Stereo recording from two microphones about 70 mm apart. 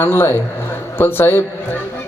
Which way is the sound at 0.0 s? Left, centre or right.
Left.